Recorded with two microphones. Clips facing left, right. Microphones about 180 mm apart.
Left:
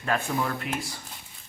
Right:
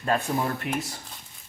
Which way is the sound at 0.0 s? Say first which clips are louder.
Right 2 dB; 35° right (ahead or behind).